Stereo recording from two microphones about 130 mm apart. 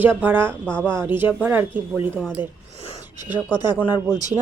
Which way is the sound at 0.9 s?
15° right (ahead or behind).